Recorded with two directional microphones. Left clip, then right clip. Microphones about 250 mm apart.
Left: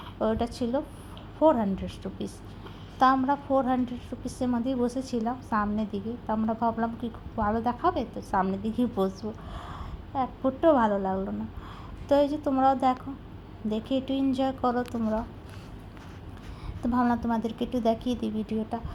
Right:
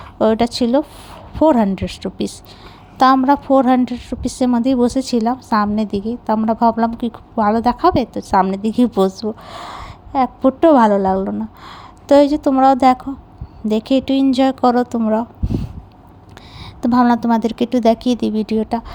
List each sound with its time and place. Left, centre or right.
0.2 s a woman's voice: right
16.8 s a woman's voice: right